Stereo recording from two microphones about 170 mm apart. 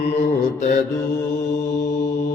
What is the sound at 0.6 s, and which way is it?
Mantra, 45° left (ahead or behind).